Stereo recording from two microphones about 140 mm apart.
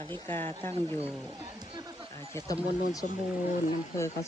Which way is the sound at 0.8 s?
35° right (ahead or behind).